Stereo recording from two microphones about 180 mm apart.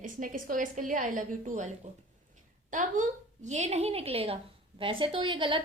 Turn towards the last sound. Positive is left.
turn(degrees=-30)  # may be behind; listen again after turning